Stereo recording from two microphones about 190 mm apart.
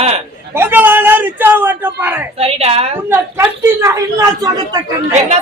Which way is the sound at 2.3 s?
30° right (ahead or behind).